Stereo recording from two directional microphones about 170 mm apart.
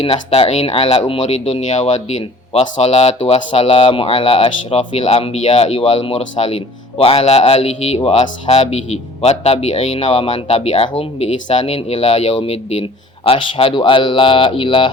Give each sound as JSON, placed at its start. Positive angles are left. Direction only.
{"t": 0.0, "sound": "speech", "side_deg": 35}